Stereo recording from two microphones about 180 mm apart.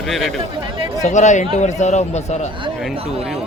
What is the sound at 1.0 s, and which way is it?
Speech, 40° left (ahead or behind).